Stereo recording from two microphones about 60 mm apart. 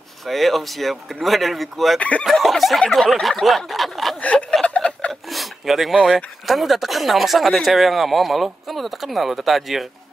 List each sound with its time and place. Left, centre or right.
0.3 s speech: centre
2.0 s speech: left
2.3 s speech: centre
4.2 s a sound: left
5.3 s a sound: centre
6.0 s speech: centre